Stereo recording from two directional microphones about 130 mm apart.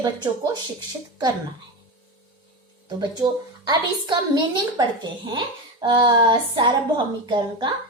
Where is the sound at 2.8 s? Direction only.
30° right (ahead or behind).